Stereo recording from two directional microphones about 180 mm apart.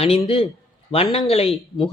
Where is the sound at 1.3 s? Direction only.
35° left (ahead or behind).